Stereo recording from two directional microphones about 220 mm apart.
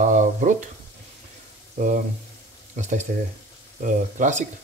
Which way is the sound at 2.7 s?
35° right (ahead or behind).